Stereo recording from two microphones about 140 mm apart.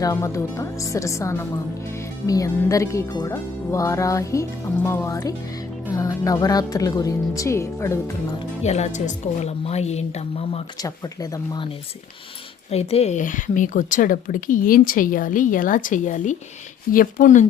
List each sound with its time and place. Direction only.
0.0 s speech: 25° left (ahead or behind)
8.6 s speech: 50° left (ahead or behind)
10.8 s speech: 25° left (ahead or behind)
12.7 s speech: 50° left (ahead or behind); by 16.4 s 65° left (ahead or behind)
16.9 s speech: 90° left